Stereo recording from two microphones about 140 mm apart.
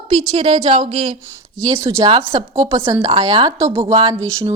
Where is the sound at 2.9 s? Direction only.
35° right (ahead or behind).